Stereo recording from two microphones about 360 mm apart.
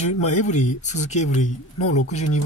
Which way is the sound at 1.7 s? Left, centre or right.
Left.